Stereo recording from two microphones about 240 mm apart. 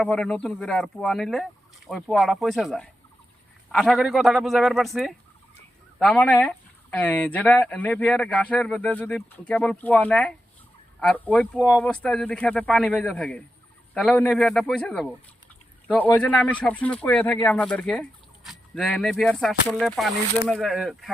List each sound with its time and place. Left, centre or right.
0.0 s speech: centre